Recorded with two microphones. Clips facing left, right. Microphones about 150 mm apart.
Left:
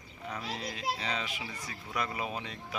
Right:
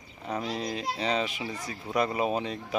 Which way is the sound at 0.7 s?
25° right (ahead or behind).